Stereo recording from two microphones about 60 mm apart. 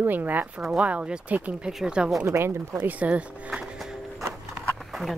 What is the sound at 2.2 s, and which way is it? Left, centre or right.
Speech, right.